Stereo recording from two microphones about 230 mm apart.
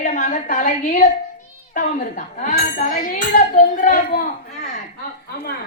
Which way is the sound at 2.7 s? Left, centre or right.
Left.